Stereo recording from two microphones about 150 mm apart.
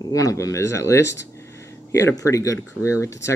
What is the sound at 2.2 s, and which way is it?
Speech, 20° left (ahead or behind).